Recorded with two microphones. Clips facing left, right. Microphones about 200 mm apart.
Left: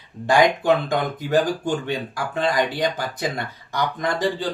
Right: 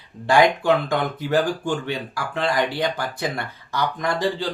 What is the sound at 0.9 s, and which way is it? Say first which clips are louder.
Speech: left 1 dB; 20° left (ahead or behind).